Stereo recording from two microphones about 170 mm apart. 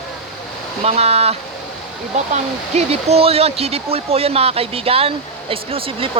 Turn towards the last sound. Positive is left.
turn(degrees=-35)  # may be behind; listen again after turning